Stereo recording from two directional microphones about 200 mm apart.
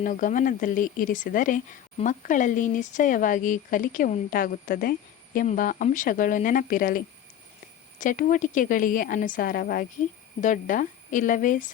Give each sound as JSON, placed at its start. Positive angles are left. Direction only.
{"t": 0.0, "sound": "a woman's voice", "side_deg": 40}